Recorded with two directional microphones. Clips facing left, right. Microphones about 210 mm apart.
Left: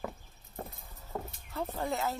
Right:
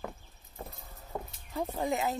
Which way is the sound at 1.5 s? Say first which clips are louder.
Right 3 dB; 15° right (ahead or behind).